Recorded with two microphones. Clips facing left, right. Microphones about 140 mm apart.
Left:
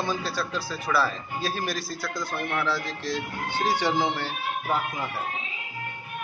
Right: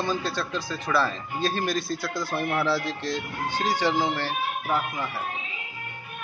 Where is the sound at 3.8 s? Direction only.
15° left (ahead or behind).